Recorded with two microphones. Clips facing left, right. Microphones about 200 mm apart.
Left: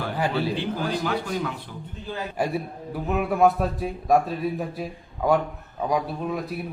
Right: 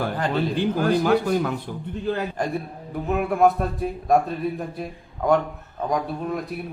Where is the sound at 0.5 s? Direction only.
50° right (ahead or behind).